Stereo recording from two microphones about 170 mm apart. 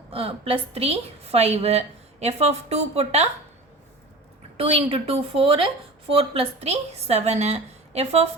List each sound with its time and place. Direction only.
0.1 s a woman's voice: 35° right (ahead or behind)
4.5 s a woman's voice: 35° right (ahead or behind)